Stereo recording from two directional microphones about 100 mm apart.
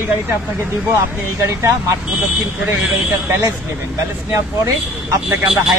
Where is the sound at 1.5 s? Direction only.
30° right (ahead or behind).